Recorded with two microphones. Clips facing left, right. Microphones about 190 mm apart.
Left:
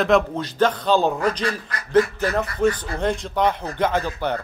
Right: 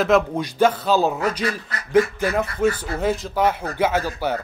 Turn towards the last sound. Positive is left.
turn(degrees=-5)  # may be behind; listen again after turning